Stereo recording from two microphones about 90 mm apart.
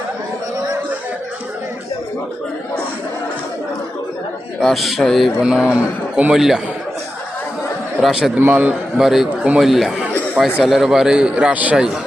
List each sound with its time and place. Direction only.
4.6 s speech: centre (ahead or behind)
5.4 s a man's voice: 10° right (ahead or behind)
6.3 s speech: 5° right (ahead or behind)
8.0 s speech: centre (ahead or behind)
8.4 s a man's voice: 20° right (ahead or behind)
9.0 s a man's voice: 5° right (ahead or behind)